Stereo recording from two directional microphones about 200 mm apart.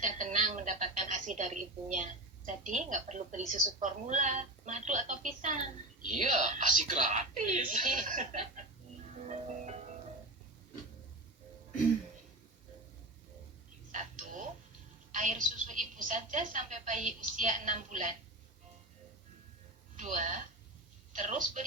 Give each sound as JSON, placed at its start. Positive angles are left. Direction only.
{"t": 0.0, "sound": "a woman's voice", "side_deg": -35}
{"t": 9.1, "sound": "music", "side_deg": -35}
{"t": 15.1, "sound": "a woman's voice", "side_deg": -40}
{"t": 20.0, "sound": "a woman's voice", "side_deg": -35}